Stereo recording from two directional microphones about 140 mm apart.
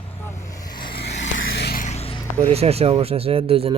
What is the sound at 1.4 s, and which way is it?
Music, 90° left.